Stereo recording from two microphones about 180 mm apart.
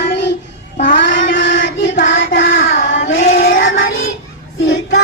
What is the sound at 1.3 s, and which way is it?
Child singing, 90° left.